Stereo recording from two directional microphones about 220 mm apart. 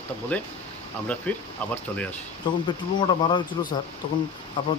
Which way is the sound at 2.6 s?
20° left (ahead or behind).